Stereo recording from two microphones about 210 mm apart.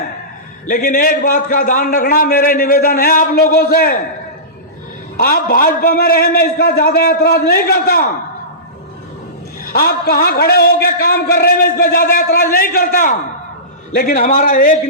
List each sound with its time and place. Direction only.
0.7 s a man's voice: 40° left (ahead or behind)
5.1 s a man's voice: 45° left (ahead or behind)
9.6 s a man's voice: 45° left (ahead or behind)